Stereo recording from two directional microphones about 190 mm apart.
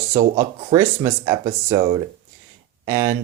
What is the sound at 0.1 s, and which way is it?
Speech, 15° right (ahead or behind).